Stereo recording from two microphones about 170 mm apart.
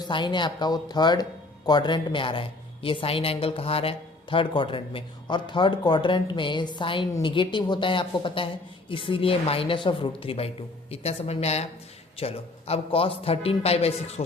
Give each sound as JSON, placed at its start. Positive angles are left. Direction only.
{"t": 0.0, "sound": "speech", "side_deg": 25}